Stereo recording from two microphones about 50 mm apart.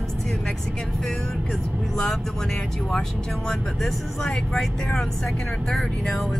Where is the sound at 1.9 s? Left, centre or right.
Centre.